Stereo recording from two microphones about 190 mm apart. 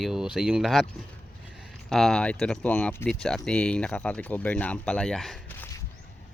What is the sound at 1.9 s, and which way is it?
Speech, 5° left (ahead or behind).